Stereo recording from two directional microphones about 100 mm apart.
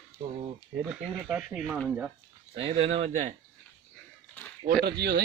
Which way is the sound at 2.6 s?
70° right (ahead or behind).